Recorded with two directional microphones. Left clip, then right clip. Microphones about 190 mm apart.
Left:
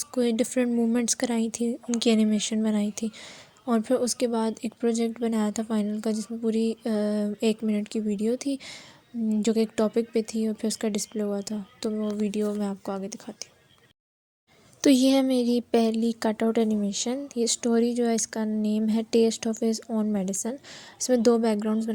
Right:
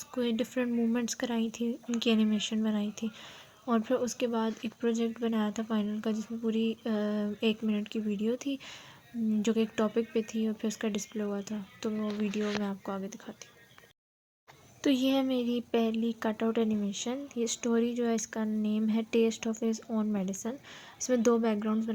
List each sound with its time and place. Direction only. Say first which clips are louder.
0.1 s speech: left 6 dB; 30° left (ahead or behind)
14.8 s speech: left 7 dB; 40° left (ahead or behind)